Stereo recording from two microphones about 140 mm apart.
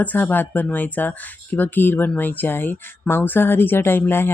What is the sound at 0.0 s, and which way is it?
Speech, 10° left (ahead or behind).